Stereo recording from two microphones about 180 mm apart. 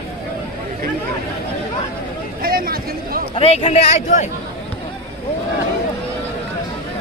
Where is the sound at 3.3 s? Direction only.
35° left (ahead or behind).